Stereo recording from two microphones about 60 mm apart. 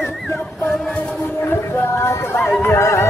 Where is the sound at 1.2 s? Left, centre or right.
Left.